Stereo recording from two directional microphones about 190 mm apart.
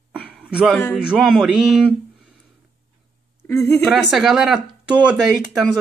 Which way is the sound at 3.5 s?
15° left (ahead or behind).